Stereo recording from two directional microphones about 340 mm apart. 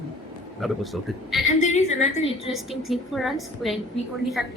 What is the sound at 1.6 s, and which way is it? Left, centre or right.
Speech, centre.